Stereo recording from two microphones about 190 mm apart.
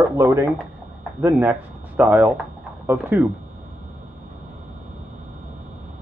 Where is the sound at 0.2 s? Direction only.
15° right (ahead or behind).